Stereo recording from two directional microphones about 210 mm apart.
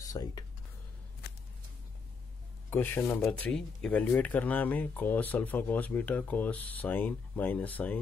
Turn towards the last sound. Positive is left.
turn(degrees=10)  # may be behind; listen again after turning